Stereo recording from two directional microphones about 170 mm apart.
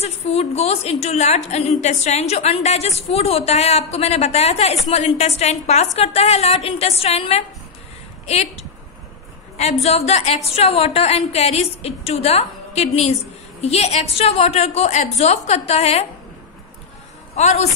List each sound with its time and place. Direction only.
0.0 s a woman's voice: 40° left (ahead or behind)
17.4 s a woman's voice: 40° left (ahead or behind)